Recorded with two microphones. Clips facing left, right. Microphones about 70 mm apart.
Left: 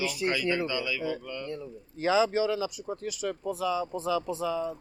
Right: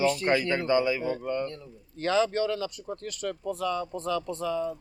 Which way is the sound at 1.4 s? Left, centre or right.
Centre.